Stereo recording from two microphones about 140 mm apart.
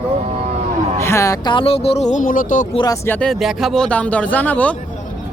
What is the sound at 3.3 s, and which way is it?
Speech, centre (ahead or behind).